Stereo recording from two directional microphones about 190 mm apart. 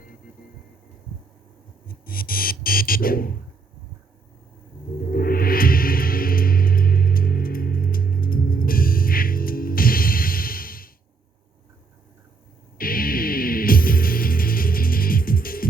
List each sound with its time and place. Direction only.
1.9 s buzzer: 50° left (ahead or behind)
5.1 s music: 50° left (ahead or behind)
12.7 s music: 50° left (ahead or behind)